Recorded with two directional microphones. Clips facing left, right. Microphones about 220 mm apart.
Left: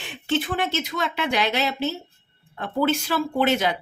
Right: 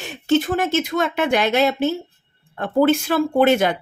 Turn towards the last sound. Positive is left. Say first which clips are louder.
# right 6 dB
turn(degrees=-50)  # may be behind; listen again after turning